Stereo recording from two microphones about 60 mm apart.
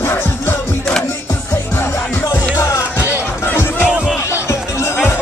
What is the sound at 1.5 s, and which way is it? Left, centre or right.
Music, left.